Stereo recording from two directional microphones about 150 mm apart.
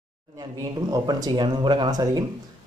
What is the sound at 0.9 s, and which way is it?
Speech, 25° right (ahead or behind).